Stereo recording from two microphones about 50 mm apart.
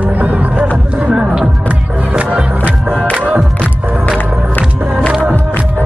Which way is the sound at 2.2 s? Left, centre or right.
Right.